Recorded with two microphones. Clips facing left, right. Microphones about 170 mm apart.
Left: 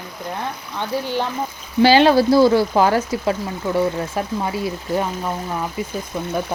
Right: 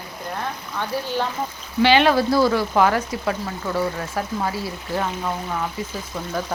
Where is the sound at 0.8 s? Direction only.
15° left (ahead or behind).